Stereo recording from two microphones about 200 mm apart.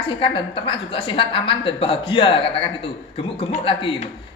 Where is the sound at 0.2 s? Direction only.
25° left (ahead or behind).